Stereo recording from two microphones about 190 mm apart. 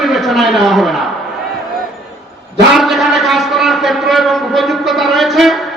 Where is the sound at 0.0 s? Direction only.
Centre (ahead or behind).